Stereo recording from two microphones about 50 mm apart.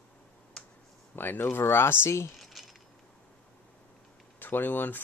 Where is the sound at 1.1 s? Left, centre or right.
Left.